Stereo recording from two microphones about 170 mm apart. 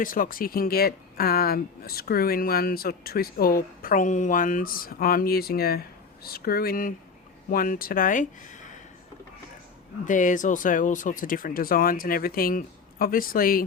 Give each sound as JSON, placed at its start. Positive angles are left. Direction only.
{"t": 0.0, "sound": "speech", "side_deg": 55}
{"t": 10.1, "sound": "speech", "side_deg": 50}